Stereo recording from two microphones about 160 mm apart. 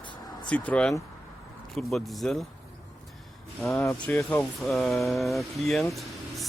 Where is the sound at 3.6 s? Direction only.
Centre (ahead or behind).